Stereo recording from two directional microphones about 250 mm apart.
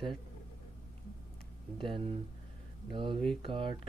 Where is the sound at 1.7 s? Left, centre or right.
Right.